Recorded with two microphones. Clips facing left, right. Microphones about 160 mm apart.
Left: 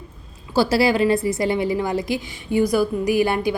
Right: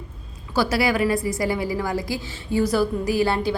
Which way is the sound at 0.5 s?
30° left (ahead or behind).